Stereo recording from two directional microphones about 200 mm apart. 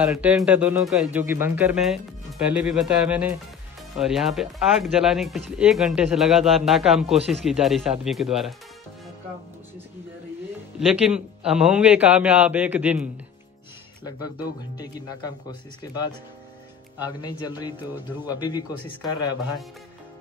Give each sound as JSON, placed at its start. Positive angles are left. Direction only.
{"t": 0.0, "sound": "speech", "side_deg": -5}
{"t": 11.1, "sound": "speech", "side_deg": -5}
{"t": 14.8, "sound": "a man's voice", "side_deg": 20}
{"t": 17.0, "sound": "a man's voice", "side_deg": 20}